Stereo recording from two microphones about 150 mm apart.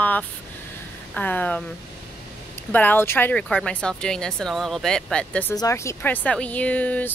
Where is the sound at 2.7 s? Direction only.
15° left (ahead or behind).